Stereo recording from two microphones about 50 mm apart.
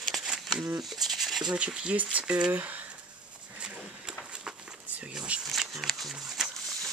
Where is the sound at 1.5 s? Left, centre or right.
Right.